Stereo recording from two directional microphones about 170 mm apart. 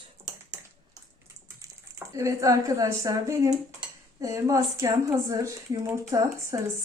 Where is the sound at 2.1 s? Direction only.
20° right (ahead or behind).